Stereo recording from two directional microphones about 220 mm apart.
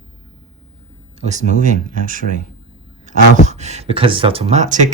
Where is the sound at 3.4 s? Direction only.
30° right (ahead or behind).